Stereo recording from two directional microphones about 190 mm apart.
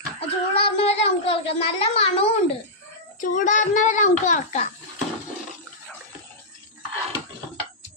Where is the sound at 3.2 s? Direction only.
45° left (ahead or behind).